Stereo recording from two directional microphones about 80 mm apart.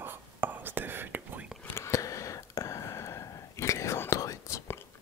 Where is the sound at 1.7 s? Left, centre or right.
Left.